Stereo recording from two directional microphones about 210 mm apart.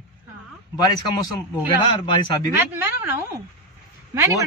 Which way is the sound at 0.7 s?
20° left (ahead or behind).